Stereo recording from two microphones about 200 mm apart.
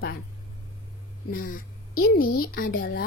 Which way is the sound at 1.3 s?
45° left (ahead or behind).